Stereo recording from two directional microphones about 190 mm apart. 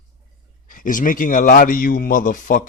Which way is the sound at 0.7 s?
45° left (ahead or behind).